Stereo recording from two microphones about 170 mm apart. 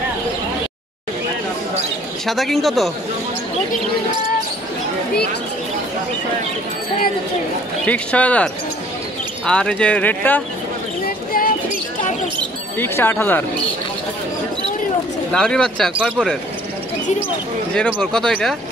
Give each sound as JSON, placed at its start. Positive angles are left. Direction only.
{"t": 2.2, "sound": "speech", "side_deg": 0}
{"t": 7.8, "sound": "speech", "side_deg": 5}
{"t": 9.5, "sound": "speech", "side_deg": 5}
{"t": 11.1, "sound": "a sound", "side_deg": 55}
{"t": 12.7, "sound": "speech", "side_deg": 15}
{"t": 15.3, "sound": "speech", "side_deg": 5}
{"t": 17.7, "sound": "speech", "side_deg": 5}